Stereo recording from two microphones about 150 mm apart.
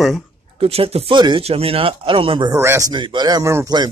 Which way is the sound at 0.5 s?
40° right (ahead or behind).